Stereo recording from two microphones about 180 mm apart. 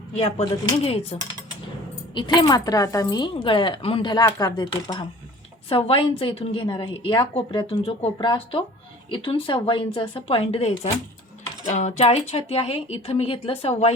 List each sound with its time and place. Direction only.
0.2 s a woman's voice: 35° left (ahead or behind)
0.5 s a woman's voice: 20° left (ahead or behind)
0.9 s a woman's voice: 35° left (ahead or behind)